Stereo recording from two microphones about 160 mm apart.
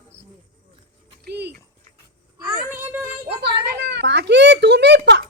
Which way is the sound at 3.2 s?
90° right.